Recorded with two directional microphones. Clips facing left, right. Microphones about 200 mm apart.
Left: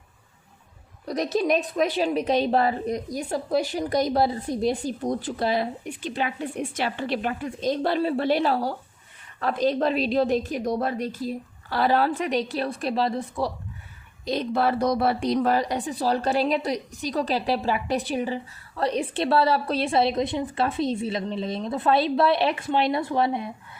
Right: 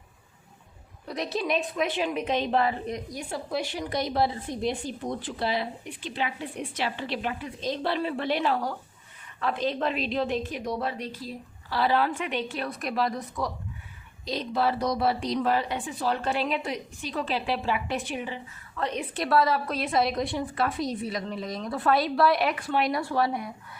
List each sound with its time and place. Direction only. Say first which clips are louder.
1.0 s a woman's voice: left 6 dB; 40° left (ahead or behind)
14.3 s a woman's voice: left 3 dB; 55° left (ahead or behind); by 23.5 s 25° left (ahead or behind)